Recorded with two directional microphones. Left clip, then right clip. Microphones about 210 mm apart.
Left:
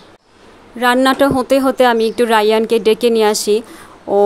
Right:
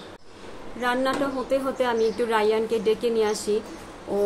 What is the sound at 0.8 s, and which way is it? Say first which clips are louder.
A woman's voice: left 12 dB; 55° left (ahead or behind).